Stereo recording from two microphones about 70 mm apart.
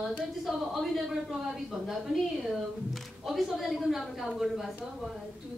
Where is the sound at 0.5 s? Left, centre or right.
Centre.